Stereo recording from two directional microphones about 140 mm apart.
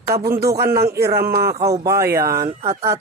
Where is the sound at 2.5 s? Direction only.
45° right (ahead or behind).